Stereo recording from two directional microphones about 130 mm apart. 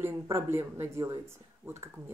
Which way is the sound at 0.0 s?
20° right (ahead or behind).